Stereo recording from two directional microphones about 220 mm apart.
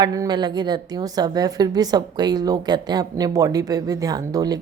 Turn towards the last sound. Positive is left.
turn(degrees=-15)  # may be behind; listen again after turning